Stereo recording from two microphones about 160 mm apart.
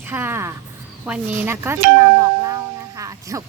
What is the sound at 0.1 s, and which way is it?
Speech, 10° right (ahead or behind).